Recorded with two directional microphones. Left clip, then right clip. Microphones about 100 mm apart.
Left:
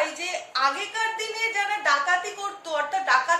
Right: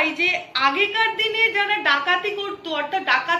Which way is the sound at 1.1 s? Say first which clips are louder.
Right 7 dB; 45° left (ahead or behind).